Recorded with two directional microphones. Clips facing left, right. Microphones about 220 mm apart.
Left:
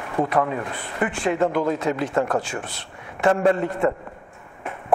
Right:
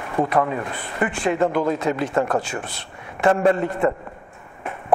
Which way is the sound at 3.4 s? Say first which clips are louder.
Right 1 dB; 25° right (ahead or behind).